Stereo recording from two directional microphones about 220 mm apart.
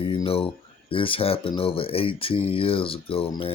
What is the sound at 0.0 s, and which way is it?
Speech, 20° left (ahead or behind).